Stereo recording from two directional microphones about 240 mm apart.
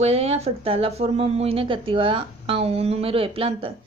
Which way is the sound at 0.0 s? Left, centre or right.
Right.